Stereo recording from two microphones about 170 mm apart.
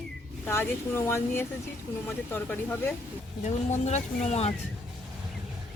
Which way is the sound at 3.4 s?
45° left (ahead or behind).